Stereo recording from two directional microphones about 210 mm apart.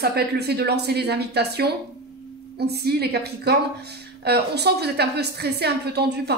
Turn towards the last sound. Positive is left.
turn(degrees=-50)  # may be behind; listen again after turning